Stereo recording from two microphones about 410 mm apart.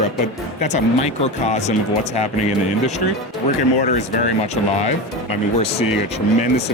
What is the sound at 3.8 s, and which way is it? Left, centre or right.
Speech, left.